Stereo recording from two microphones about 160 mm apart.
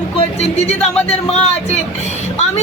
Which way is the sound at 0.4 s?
45° left (ahead or behind).